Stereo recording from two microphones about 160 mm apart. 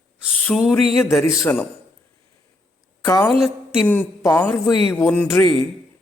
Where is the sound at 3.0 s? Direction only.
10° left (ahead or behind).